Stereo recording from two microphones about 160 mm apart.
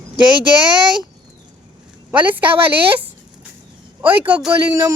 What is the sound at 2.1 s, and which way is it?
Speech, 10° right (ahead or behind).